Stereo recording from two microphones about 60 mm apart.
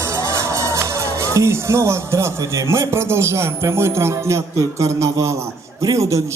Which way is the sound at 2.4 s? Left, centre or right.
Right.